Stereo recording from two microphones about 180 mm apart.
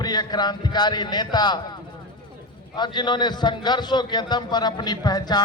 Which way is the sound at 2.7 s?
25° left (ahead or behind).